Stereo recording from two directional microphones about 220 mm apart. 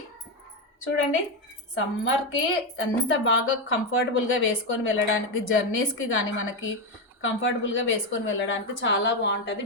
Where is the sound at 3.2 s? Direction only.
65° left (ahead or behind).